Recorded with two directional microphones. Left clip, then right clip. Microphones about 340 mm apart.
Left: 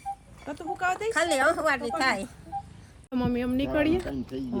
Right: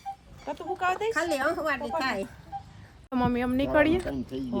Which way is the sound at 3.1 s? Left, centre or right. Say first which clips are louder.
Right 2 dB; centre.